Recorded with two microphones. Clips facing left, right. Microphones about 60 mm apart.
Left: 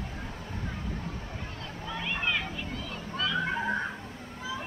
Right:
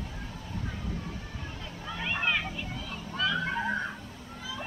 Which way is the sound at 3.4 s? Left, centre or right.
Centre.